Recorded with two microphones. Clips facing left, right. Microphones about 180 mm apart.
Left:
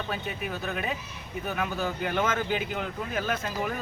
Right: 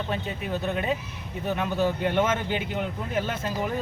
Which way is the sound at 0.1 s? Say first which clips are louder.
Right 3 dB; 25° right (ahead or behind).